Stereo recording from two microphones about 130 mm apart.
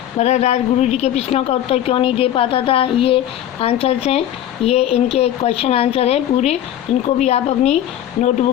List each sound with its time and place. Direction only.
0.2 s a woman's voice: 60° left (ahead or behind)